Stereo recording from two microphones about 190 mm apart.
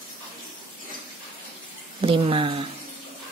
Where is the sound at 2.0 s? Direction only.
25° right (ahead or behind).